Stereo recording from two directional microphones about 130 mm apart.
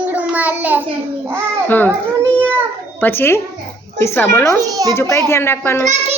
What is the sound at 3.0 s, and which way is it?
A woman's voice, 15° left (ahead or behind).